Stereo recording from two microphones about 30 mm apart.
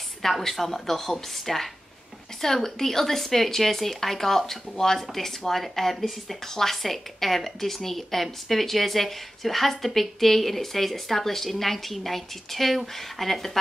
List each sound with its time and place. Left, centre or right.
0.2 s speech: centre